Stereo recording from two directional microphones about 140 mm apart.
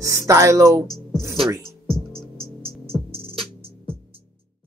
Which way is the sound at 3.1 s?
40° right (ahead or behind).